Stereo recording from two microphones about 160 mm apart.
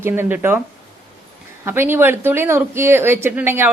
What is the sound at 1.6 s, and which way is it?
A man's voice, 15° right (ahead or behind).